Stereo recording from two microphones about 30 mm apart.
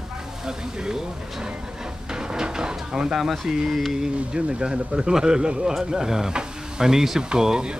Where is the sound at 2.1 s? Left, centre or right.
Right.